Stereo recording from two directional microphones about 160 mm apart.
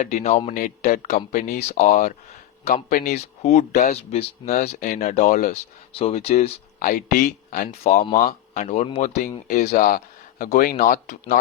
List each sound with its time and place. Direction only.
0.0 s speech: 45° left (ahead or behind)
5.9 s speech: 40° left (ahead or behind); by 11.0 s 65° left (ahead or behind)